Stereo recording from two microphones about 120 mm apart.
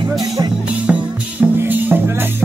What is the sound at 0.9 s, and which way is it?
Music, 15° right (ahead or behind).